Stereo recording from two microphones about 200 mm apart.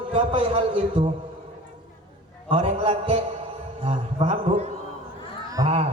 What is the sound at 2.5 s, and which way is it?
A man's voice, 30° right (ahead or behind).